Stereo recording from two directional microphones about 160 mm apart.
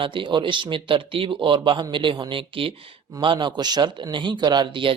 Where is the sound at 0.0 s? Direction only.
30° right (ahead or behind).